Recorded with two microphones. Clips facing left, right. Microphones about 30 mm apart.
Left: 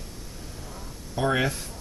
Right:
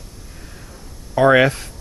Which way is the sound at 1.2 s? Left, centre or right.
Right.